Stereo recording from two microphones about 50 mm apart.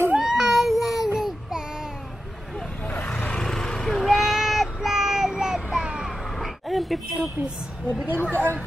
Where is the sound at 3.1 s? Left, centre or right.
Left.